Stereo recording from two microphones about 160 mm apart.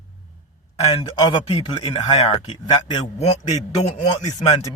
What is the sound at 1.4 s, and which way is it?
Speech, 40° left (ahead or behind).